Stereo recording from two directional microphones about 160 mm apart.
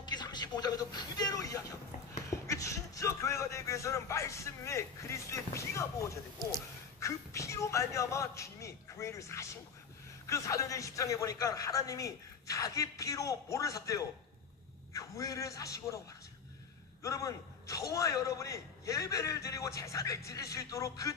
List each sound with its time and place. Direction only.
0.0 s a sound: 25° left (ahead or behind)
2.4 s a man's voice: 20° left (ahead or behind)
17.0 s a man's voice: 20° left (ahead or behind)